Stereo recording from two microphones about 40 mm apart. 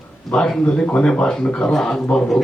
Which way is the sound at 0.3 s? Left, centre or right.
Centre.